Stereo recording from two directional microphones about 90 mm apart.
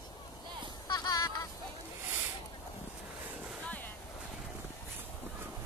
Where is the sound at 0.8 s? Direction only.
50° left (ahead or behind).